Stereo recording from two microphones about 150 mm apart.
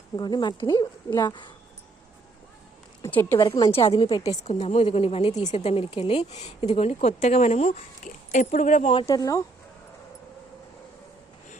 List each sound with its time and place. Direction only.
0.2 s speech: 30° left (ahead or behind)
3.0 s speech: 15° left (ahead or behind)
3.3 s a woman's voice: 35° left (ahead or behind)
4.4 s a woman's voice: 50° left (ahead or behind)
9.0 s speech: 20° left (ahead or behind)